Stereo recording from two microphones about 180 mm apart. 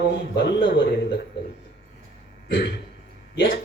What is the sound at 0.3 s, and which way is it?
Speech, 70° left (ahead or behind).